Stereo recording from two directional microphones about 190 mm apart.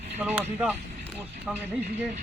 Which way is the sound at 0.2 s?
10° right (ahead or behind).